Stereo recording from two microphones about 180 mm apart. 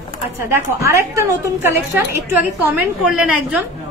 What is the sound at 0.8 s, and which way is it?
A woman's voice, 15° right (ahead or behind).